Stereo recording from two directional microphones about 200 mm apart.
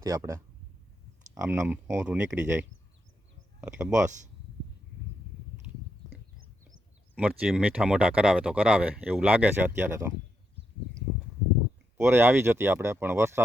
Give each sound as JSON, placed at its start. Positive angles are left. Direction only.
{"t": 0.0, "sound": "speech", "side_deg": -15}
{"t": 1.5, "sound": "speech", "side_deg": -10}
{"t": 7.2, "sound": "speech", "side_deg": -5}
{"t": 11.9, "sound": "speech", "side_deg": -10}